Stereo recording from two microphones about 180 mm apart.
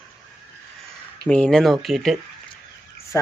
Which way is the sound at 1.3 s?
5° left (ahead or behind).